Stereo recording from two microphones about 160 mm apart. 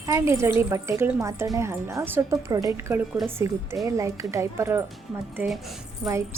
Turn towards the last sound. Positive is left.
turn(degrees=0)  # may be behind; listen again after turning